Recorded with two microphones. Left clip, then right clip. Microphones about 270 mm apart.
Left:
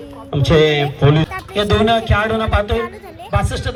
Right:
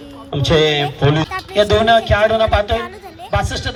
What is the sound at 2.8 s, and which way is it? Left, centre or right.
Speech, centre.